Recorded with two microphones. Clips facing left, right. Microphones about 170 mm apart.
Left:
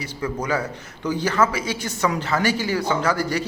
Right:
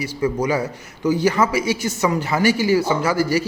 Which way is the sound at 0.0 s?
10° right (ahead or behind).